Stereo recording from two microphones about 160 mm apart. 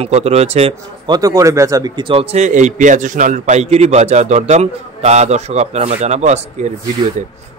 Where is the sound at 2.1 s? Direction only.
40° right (ahead or behind).